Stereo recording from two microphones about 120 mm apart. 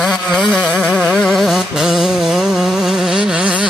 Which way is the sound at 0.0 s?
5° left (ahead or behind).